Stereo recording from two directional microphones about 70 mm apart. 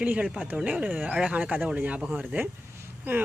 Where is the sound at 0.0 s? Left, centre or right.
Centre.